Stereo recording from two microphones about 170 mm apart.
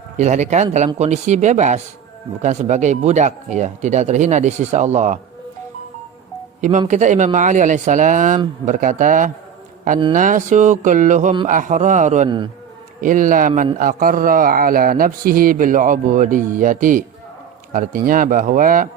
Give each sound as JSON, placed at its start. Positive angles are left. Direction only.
{"t": 0.2, "sound": "a man's voice", "side_deg": -45}
{"t": 6.6, "sound": "a man's voice", "side_deg": -45}